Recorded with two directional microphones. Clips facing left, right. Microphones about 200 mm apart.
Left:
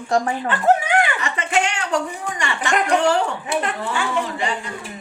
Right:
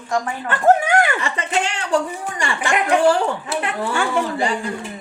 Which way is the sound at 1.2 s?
35° right (ahead or behind).